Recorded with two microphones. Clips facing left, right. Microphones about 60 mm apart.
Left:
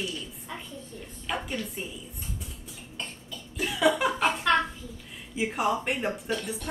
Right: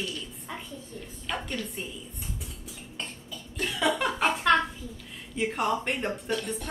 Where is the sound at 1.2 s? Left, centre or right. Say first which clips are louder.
Left 1 dB; centre.